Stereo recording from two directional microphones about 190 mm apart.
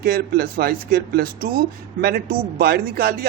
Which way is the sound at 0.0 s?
55° right (ahead or behind).